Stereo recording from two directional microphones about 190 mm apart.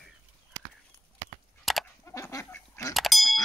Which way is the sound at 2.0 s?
15° left (ahead or behind).